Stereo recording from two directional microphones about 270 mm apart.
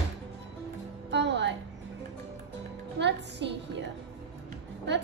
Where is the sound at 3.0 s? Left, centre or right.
Right.